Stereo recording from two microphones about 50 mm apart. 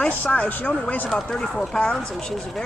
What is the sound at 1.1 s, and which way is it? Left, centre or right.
Speech, centre.